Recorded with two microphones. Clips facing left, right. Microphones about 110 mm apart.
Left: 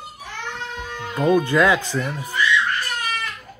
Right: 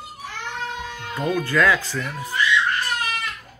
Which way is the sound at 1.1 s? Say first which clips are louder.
Left 5 dB; 20° left (ahead or behind).